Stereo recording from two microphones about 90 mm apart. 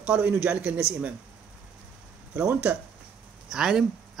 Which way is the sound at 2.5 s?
20° right (ahead or behind).